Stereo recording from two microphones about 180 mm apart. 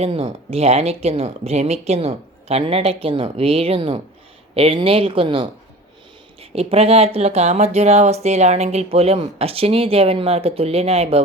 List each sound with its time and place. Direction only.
0.0 s speech: 35° right (ahead or behind)